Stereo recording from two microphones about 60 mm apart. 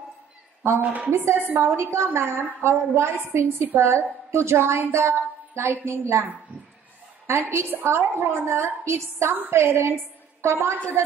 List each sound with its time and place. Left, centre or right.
1.1 s a woman's voice: right
1.8 s a woman's voice: right
7.2 s a woman's voice: right
9.3 s a woman's voice: right